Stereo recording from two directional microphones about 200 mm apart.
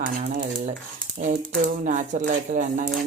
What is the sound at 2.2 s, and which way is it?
Speech, 45° right (ahead or behind).